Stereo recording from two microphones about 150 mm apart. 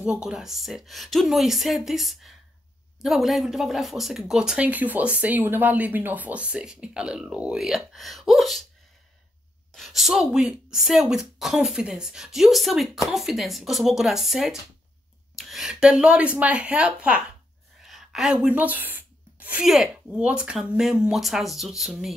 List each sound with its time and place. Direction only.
0.0 s speech: 5° right (ahead or behind)
9.8 s a woman's voice: centre (ahead or behind)